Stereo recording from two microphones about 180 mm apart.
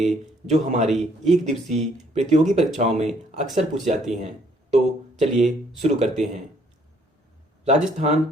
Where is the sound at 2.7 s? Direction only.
40° right (ahead or behind).